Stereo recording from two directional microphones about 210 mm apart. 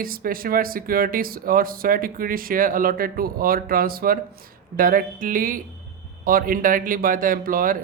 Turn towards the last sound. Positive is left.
turn(degrees=-40)  # may be behind; listen again after turning